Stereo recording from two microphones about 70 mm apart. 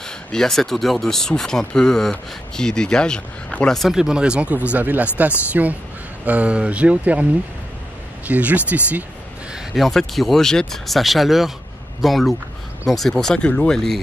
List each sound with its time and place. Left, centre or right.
0.0 s speech: centre
3.9 s speech: centre
8.3 s speech: right
9.8 s speech: centre